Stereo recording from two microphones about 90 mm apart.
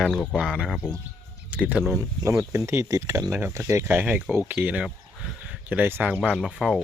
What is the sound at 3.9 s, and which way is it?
Speech, 20° right (ahead or behind).